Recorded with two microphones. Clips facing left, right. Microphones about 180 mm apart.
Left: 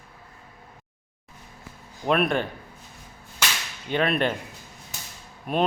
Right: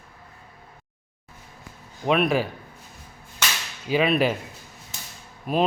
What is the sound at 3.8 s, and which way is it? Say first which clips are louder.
Whip: right 3 dB; 5° right (ahead or behind).